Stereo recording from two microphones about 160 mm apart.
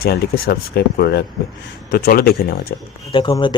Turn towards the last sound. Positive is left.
turn(degrees=30)  # may be behind; listen again after turning